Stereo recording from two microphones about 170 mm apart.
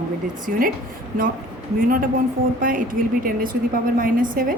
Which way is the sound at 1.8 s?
55° right (ahead or behind).